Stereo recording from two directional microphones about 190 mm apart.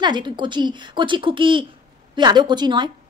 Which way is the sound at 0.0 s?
25° right (ahead or behind).